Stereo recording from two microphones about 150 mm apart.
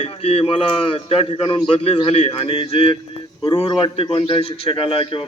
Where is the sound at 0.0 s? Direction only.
40° left (ahead or behind).